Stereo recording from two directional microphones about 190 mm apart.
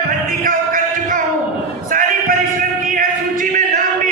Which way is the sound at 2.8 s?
45° right (ahead or behind).